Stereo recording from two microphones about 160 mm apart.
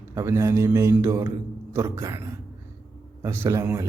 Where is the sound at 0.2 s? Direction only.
20° right (ahead or behind).